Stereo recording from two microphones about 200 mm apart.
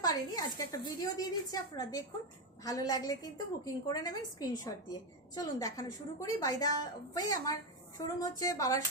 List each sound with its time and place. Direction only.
0.0 s a woman's voice: 20° left (ahead or behind)